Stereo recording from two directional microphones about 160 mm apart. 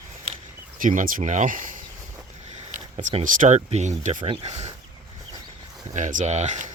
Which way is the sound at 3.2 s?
50° right (ahead or behind).